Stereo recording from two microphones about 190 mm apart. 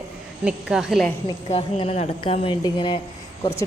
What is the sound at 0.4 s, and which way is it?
Speech, 5° right (ahead or behind).